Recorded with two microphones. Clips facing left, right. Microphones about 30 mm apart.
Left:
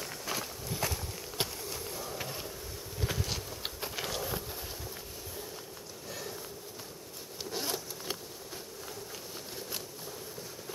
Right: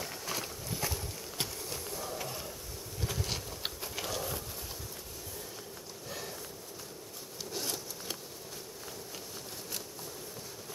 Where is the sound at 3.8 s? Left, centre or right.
Centre.